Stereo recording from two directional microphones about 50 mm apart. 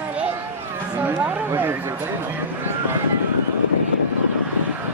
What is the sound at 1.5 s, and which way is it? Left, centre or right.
Speech, right.